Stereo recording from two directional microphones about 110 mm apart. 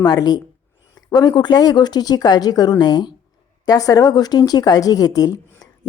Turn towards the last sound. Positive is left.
turn(degrees=35)  # may be behind; listen again after turning